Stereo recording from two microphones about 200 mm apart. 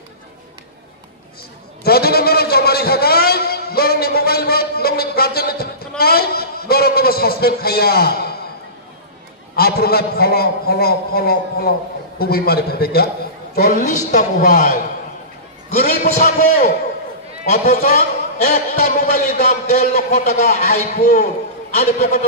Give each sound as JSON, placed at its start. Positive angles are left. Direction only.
{"t": 1.8, "sound": "a sound", "side_deg": 50}
{"t": 9.6, "sound": "a man's voice", "side_deg": 50}
{"t": 21.7, "sound": "a man's voice", "side_deg": 40}